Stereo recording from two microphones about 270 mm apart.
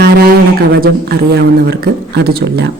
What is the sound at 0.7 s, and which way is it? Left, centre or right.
A man's voice, right.